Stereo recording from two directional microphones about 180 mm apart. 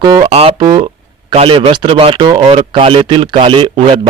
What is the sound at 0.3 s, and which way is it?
Speech, 35° right (ahead or behind).